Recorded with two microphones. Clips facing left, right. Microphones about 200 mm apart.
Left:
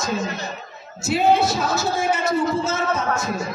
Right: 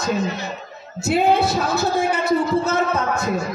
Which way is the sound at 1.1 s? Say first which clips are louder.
Right 1 dB; 60° right (ahead or behind).